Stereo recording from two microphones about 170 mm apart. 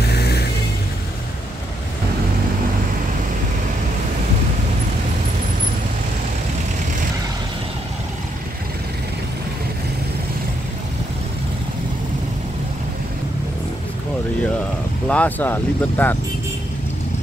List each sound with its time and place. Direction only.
0.1 s vehicle: 70° left (ahead or behind)
15.0 s speech: 10° left (ahead or behind)